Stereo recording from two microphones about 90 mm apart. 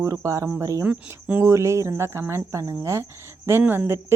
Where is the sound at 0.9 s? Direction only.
15° right (ahead or behind).